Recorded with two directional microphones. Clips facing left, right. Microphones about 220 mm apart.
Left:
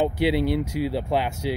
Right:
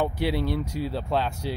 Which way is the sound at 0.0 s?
15° left (ahead or behind).